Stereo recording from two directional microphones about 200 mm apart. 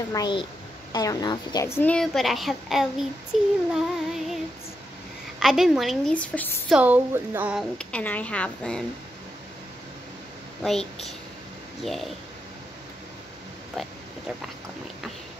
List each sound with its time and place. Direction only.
0.1 s a woman's voice: 20° left (ahead or behind); by 3.1 s centre (ahead or behind)
3.7 s music: centre (ahead or behind)
5.4 s a woman's voice: centre (ahead or behind)
6.7 s a woman's voice: 10° right (ahead or behind)
10.6 s a woman's voice: centre (ahead or behind)
13.8 s a woman's voice: centre (ahead or behind)